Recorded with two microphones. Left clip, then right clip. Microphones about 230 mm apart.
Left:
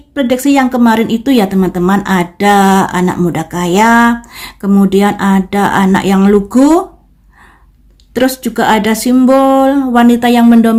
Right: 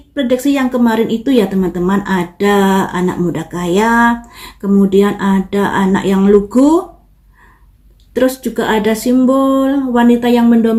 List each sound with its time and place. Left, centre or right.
0.1 s speech: left
8.1 s speech: left